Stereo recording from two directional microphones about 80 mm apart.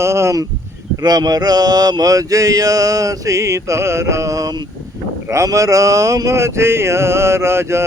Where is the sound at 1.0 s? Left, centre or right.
Right.